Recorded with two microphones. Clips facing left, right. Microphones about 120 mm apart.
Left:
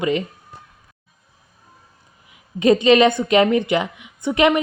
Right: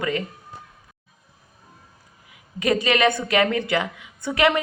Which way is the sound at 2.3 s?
25° left (ahead or behind).